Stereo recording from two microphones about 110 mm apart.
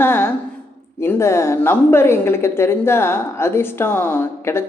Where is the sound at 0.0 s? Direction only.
20° left (ahead or behind).